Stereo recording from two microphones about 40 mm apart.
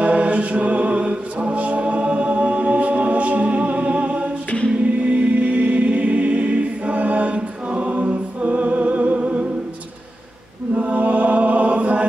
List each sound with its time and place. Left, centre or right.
0.0 s music: right
4.8 s choir: right
10.8 s chant: right